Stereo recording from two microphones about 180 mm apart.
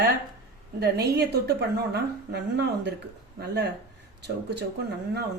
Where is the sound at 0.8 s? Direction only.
65° right (ahead or behind).